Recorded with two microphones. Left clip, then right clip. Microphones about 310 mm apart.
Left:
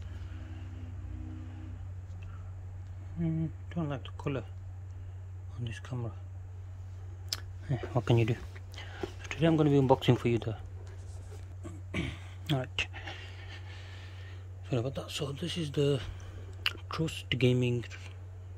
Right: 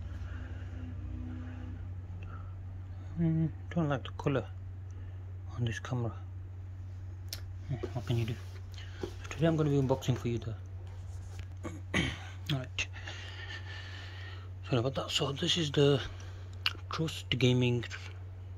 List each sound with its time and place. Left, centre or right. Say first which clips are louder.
3.2 s speech: right 2 dB; centre
5.5 s speech: right 5 dB; centre
7.2 s speech: left 7 dB; centre
11.6 s a sound: right 5 dB; centre
16.6 s speech: left 1 dB; centre